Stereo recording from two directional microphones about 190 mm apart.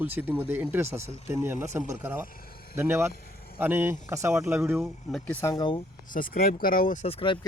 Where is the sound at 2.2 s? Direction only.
50° left (ahead or behind).